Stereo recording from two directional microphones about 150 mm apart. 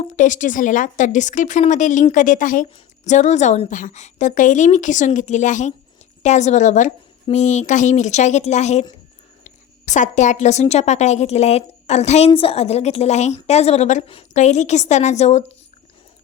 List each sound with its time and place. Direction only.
0.0 s a woman's voice: 55° left (ahead or behind)